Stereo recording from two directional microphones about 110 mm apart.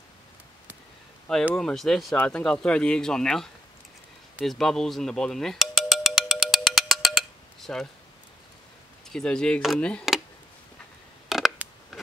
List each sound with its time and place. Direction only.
1.2 s speech: 10° left (ahead or behind)
4.5 s music: 5° left (ahead or behind)
9.1 s speech: 5° left (ahead or behind)
11.2 s a sound: centre (ahead or behind)